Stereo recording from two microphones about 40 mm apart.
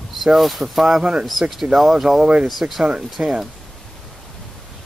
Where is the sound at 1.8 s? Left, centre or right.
Centre.